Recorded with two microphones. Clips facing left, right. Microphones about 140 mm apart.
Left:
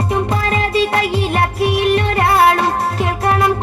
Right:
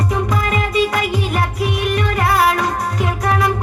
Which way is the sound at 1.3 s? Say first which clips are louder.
Left 4 dB; 65° left (ahead or behind).